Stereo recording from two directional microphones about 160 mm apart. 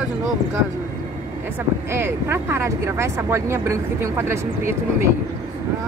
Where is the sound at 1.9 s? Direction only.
15° right (ahead or behind).